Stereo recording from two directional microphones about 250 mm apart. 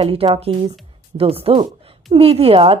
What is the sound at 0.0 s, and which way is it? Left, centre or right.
Speech, right.